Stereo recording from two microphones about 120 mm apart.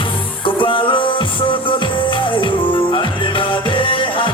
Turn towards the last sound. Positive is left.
turn(degrees=45)  # may be behind; listen again after turning